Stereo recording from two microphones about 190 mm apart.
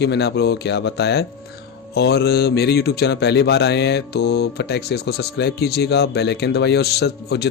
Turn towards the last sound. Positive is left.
turn(degrees=60)  # may be behind; listen again after turning